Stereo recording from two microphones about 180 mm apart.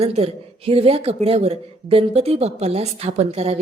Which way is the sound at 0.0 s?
35° right (ahead or behind).